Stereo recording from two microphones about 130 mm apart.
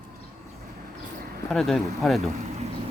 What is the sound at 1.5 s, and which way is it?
Speech, 5° left (ahead or behind).